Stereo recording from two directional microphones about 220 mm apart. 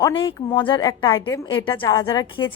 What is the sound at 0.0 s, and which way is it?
A woman's voice, 20° left (ahead or behind).